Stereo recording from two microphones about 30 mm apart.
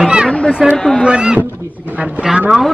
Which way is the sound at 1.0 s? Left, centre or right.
Right.